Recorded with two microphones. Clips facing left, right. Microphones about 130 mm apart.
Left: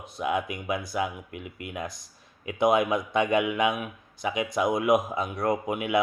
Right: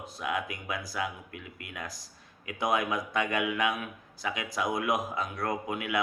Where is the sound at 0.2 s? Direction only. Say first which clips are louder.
Left 5 dB; 25° left (ahead or behind).